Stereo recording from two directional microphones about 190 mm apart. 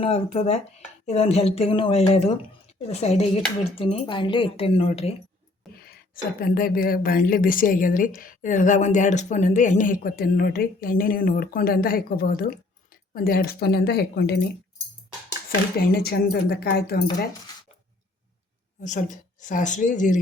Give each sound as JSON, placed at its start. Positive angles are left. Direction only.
{"t": 0.0, "sound": "speech", "side_deg": 35}
{"t": 5.6, "sound": "a sound", "side_deg": 0}
{"t": 6.4, "sound": "a woman's voice", "side_deg": 50}
{"t": 16.0, "sound": "speech", "side_deg": 55}
{"t": 18.8, "sound": "speech", "side_deg": 40}